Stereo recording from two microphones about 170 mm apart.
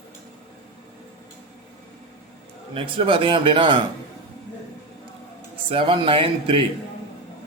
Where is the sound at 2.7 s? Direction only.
30° right (ahead or behind).